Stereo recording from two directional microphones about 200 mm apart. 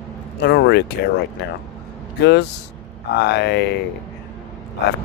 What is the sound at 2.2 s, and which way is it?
Speech, 60° left (ahead or behind).